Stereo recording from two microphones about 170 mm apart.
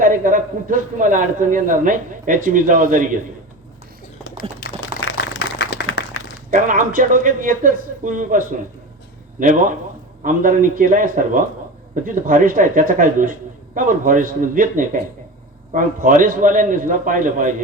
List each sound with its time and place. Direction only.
0.0 s a man's voice: 50° right (ahead or behind)
5.4 s a sound: 85° left
6.5 s a man's voice: 50° right (ahead or behind)